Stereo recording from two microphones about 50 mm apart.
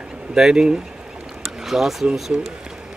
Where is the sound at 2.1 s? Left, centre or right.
Centre.